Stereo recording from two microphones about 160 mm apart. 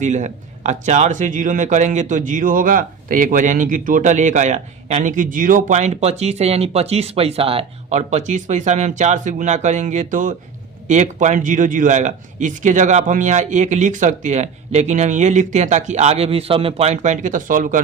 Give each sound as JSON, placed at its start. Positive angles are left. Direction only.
{"t": 0.0, "sound": "speech", "side_deg": -50}